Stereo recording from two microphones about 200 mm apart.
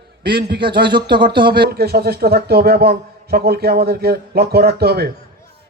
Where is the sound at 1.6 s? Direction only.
50° right (ahead or behind).